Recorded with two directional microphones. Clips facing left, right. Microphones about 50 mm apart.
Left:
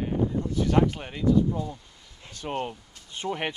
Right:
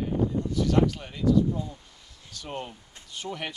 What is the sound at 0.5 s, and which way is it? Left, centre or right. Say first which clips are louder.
Speech: left 1 dB; left.